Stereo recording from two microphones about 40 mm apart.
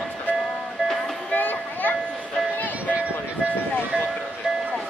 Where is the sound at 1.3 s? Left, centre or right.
Left.